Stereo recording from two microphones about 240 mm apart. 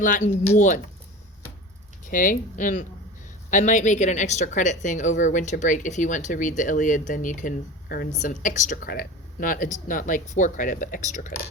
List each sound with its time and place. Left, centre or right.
0.0 s speech: left
2.0 s speech: left